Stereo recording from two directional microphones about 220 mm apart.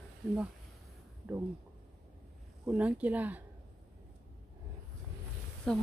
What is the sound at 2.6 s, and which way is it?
Speech, 5° right (ahead or behind).